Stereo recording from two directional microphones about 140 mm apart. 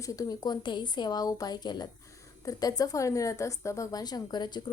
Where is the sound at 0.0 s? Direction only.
25° left (ahead or behind).